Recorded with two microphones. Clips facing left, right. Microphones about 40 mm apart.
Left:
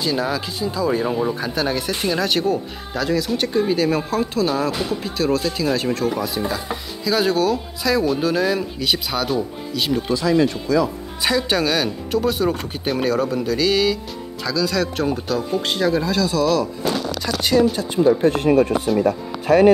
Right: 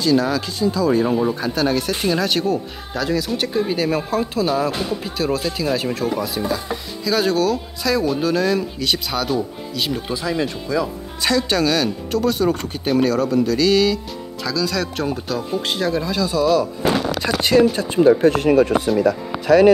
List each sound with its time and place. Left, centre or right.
0.0 s speech: centre
11.2 s speech: centre
17.2 s speech: right
17.6 s speech: right